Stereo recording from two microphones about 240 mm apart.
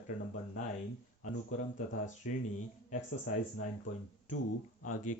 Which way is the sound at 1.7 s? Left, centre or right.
Left.